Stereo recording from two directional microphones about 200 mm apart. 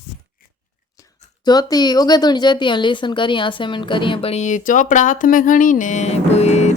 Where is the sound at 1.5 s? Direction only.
20° left (ahead or behind).